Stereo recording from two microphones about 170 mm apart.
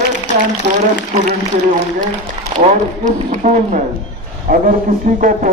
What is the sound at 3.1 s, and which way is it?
Speech, 45° right (ahead or behind).